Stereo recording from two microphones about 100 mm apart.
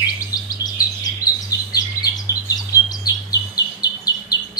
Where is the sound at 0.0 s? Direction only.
40° left (ahead or behind).